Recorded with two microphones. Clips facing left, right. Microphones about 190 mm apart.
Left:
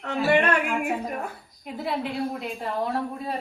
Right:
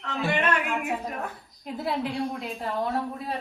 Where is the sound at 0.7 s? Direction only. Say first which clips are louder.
Left 2 dB; centre (ahead or behind).